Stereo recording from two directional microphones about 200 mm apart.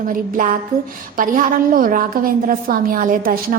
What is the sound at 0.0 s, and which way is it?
A woman's voice, 40° right (ahead or behind).